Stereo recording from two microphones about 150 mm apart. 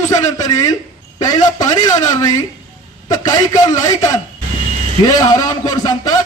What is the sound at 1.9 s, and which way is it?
A man's voice, 25° left (ahead or behind).